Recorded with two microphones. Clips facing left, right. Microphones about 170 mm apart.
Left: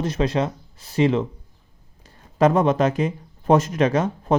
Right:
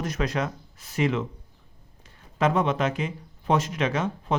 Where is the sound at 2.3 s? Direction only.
40° left (ahead or behind).